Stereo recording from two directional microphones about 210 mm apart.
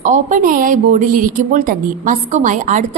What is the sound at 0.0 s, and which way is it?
Speech, 40° right (ahead or behind).